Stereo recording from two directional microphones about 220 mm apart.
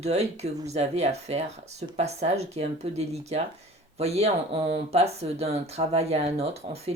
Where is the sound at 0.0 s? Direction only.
30° right (ahead or behind).